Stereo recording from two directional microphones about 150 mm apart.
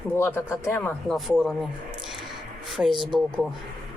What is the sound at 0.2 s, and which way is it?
Speech, 15° left (ahead or behind).